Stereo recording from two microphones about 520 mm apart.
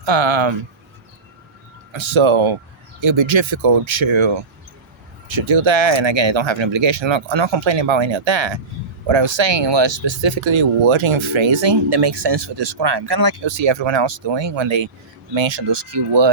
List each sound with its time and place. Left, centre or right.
0.0 s speech: right
1.9 s speech: right